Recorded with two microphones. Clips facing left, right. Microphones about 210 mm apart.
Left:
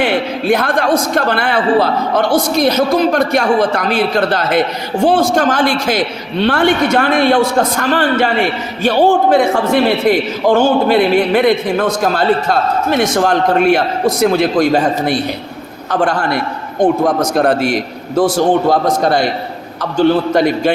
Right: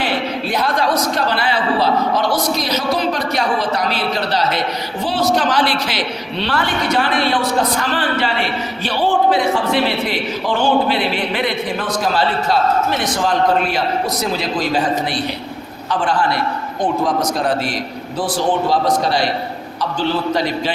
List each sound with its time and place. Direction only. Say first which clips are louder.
0.0 s a sound: left 5 dB; 50° left (ahead or behind)
1.1 s a man's voice: left 4 dB; 50° left (ahead or behind)
13.7 s a man's voice: left 5 dB; 60° left (ahead or behind)
16.0 s a man's voice: left 2 dB; 45° left (ahead or behind)
17.3 s a man's voice: left 6 dB; 60° left (ahead or behind)
18.2 s a man's voice: left 7 dB; 45° left (ahead or behind)